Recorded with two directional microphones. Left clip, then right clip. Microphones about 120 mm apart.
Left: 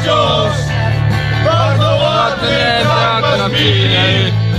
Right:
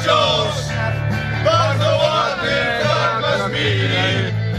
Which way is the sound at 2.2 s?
25° left (ahead or behind).